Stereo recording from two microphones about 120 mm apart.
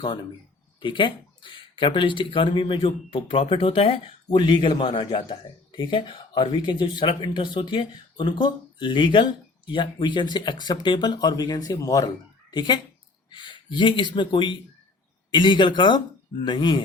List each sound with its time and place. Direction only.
0.8 s speech: 40° left (ahead or behind)
4.3 s a man's voice: 40° left (ahead or behind)